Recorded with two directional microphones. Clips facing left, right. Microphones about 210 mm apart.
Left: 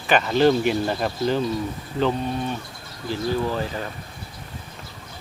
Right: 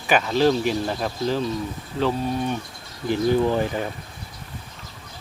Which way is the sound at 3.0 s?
20° right (ahead or behind).